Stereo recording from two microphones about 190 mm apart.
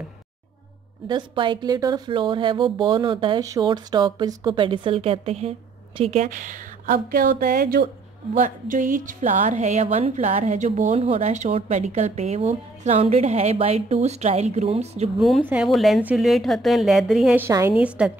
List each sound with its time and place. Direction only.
1.0 s a woman's voice: 25° right (ahead or behind)
15.1 s a woman's voice: centre (ahead or behind)
17.5 s a woman's voice: 15° right (ahead or behind)